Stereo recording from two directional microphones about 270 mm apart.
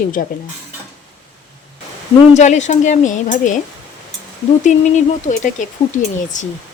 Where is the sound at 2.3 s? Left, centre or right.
Left.